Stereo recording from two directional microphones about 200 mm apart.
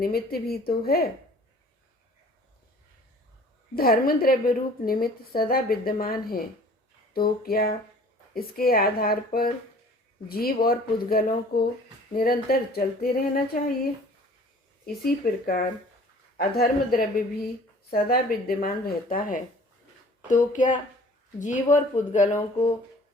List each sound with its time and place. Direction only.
0.0 s a woman's voice: 50° left (ahead or behind)
3.8 s a woman's voice: 45° left (ahead or behind)
14.8 s a woman's voice: 45° left (ahead or behind)